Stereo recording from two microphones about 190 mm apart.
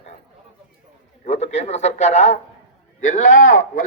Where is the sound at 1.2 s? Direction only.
35° left (ahead or behind).